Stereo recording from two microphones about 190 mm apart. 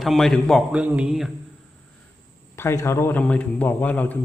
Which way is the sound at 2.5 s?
15° left (ahead or behind).